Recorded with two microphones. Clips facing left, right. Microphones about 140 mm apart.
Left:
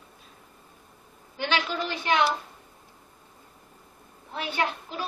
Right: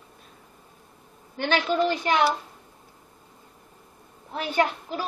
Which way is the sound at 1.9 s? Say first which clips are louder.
Right 2 dB; 35° right (ahead or behind).